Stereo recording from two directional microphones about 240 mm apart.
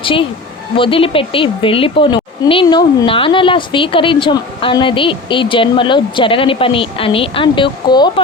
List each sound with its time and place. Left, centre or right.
0.0 s a woman's voice: left